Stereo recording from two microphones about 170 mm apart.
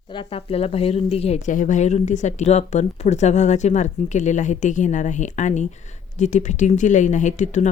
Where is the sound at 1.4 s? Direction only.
50° left (ahead or behind).